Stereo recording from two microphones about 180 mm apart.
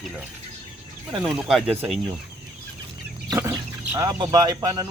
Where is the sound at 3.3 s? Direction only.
20° right (ahead or behind).